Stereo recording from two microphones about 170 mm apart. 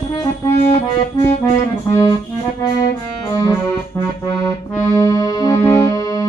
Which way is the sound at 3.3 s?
15° left (ahead or behind).